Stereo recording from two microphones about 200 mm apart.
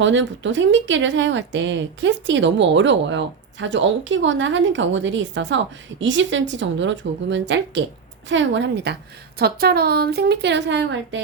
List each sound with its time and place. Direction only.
0.0 s a woman's voice: 65° right (ahead or behind)